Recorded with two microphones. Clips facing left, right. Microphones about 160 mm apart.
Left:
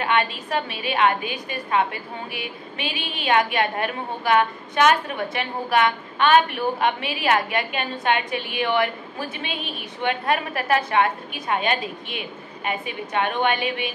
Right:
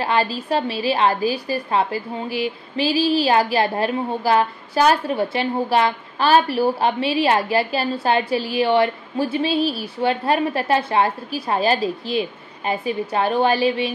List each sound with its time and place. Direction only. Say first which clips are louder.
0.0 s a woman's voice: right 2 dB; 35° right (ahead or behind)